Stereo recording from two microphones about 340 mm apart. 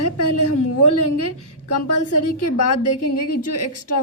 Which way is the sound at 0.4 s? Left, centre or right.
Left.